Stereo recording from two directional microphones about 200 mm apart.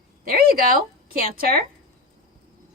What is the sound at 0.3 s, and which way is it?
A woman's voice, 45° right (ahead or behind).